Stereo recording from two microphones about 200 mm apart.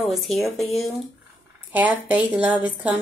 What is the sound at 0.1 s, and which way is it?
A woman's voice, centre (ahead or behind).